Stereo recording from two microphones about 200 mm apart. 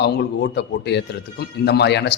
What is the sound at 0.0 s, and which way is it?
A man's voice, 60° left (ahead or behind).